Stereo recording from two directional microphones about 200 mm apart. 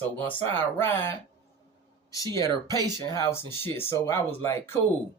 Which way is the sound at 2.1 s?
15° left (ahead or behind).